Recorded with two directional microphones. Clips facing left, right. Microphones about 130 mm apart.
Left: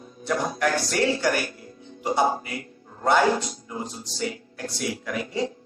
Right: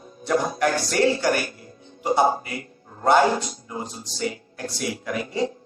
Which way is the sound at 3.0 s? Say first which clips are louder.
Right 3 dB; 30° right (ahead or behind).